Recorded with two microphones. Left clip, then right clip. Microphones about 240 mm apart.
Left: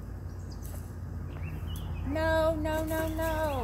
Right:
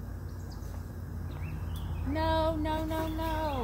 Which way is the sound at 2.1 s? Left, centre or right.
Centre.